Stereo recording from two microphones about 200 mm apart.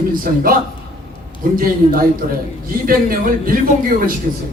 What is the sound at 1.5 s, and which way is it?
A man's voice, 45° right (ahead or behind).